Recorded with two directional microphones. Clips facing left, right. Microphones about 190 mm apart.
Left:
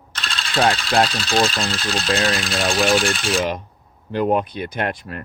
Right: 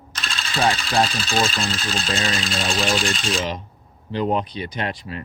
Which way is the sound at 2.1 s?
65° left (ahead or behind).